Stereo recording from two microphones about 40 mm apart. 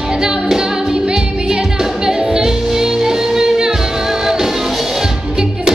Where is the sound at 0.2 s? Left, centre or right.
Centre.